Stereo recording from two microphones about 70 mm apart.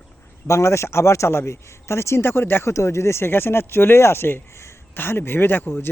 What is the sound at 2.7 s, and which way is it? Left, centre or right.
Speech, left.